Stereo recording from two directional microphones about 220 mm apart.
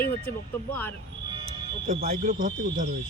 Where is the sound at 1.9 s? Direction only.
40° right (ahead or behind).